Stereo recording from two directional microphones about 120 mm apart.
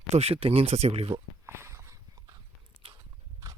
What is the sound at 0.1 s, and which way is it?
Speech, 55° right (ahead or behind).